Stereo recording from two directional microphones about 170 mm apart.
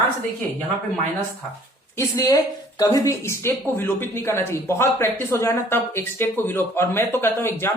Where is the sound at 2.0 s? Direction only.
20° left (ahead or behind).